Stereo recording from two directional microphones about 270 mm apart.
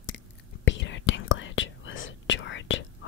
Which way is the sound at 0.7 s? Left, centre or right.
Left.